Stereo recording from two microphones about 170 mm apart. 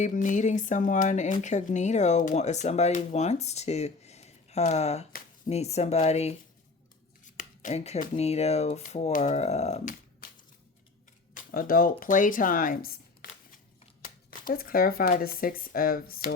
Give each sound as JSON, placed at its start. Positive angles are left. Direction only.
{"t": 0.0, "sound": "speech", "side_deg": 50}
{"t": 7.3, "sound": "speech", "side_deg": 45}
{"t": 11.5, "sound": "speech", "side_deg": 55}
{"t": 14.5, "sound": "speech", "side_deg": 60}